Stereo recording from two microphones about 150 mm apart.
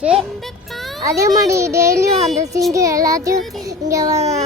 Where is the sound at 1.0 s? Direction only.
20° right (ahead or behind).